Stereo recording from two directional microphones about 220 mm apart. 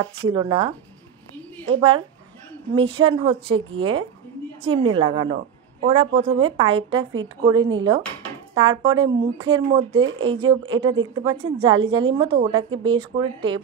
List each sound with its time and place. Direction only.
0.3 s a woman's voice: 20° right (ahead or behind)
4.6 s a woman's voice: 25° right (ahead or behind)
10.0 s speech: 65° right (ahead or behind)
10.3 s a woman's voice: 20° right (ahead or behind)